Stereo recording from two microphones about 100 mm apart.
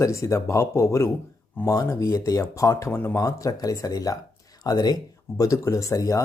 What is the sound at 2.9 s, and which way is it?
Speech, 20° left (ahead or behind).